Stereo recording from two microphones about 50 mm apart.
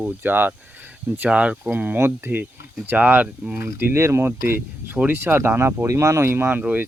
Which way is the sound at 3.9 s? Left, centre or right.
Right.